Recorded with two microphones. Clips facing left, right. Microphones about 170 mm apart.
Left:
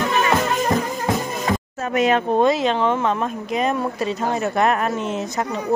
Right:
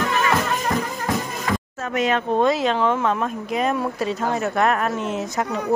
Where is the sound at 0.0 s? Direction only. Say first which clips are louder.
Left 2 dB; 25° left (ahead or behind).